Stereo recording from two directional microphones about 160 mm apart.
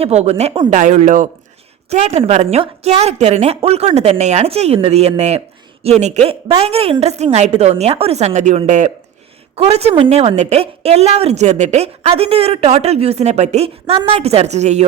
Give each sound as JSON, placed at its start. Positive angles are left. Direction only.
{"t": 0.0, "sound": "a woman's voice", "side_deg": -40}